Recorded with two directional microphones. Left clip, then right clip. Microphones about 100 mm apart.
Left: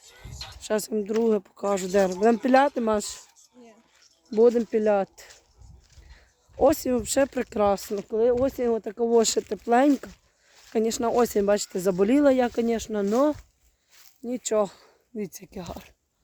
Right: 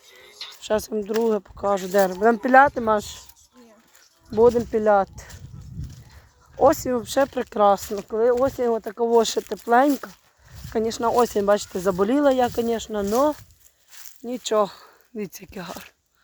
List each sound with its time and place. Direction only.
0.0 s a sound: 40° left (ahead or behind)
0.3 s a sound: 90° left
0.7 s speech: 40° left (ahead or behind)
4.4 s speech: 40° left (ahead or behind)
6.6 s speech: 40° left (ahead or behind)
10.8 s speech: 50° left (ahead or behind)
14.3 s speech: 15° left (ahead or behind)